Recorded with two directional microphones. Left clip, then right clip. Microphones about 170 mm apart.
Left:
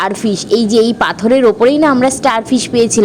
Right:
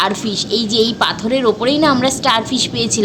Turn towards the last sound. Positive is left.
turn(degrees=45)  # may be behind; listen again after turning